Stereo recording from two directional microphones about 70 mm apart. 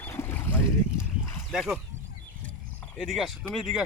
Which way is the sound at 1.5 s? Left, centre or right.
Centre.